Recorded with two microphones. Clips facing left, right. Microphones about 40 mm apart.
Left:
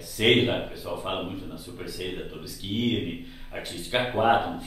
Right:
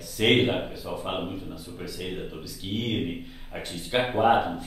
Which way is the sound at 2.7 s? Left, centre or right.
Centre.